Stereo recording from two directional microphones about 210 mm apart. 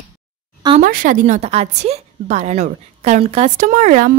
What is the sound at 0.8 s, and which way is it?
Speech, 40° right (ahead or behind).